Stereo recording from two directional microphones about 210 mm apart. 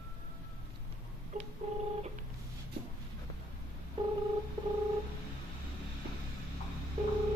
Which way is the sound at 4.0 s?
20° right (ahead or behind).